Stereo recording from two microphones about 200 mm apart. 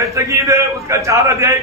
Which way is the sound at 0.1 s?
15° right (ahead or behind).